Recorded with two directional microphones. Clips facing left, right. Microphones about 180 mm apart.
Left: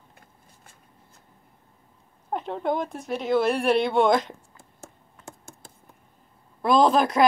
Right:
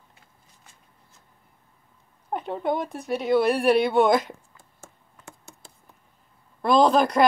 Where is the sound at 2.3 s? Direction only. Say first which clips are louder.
Even; 5° right (ahead or behind).